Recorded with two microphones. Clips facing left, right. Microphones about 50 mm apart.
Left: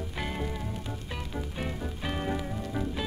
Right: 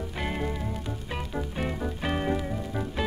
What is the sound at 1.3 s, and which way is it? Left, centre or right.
Music, centre.